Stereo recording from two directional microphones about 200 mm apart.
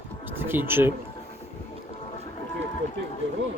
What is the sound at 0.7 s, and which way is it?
Speech, 10° right (ahead or behind).